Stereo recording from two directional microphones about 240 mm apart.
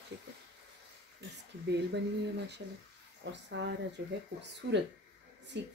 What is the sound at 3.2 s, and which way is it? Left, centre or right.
A woman's voice, right.